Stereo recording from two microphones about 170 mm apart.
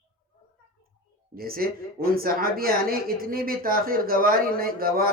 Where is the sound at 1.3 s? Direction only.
60° right (ahead or behind).